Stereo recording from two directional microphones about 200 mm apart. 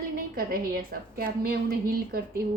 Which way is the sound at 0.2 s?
45° right (ahead or behind).